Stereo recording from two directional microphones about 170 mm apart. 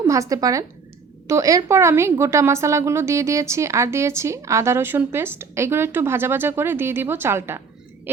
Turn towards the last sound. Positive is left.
turn(degrees=-15)  # may be behind; listen again after turning